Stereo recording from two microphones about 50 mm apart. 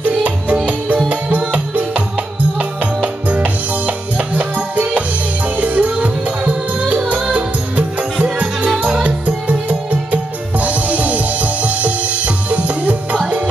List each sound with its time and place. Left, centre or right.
0.0 s music: right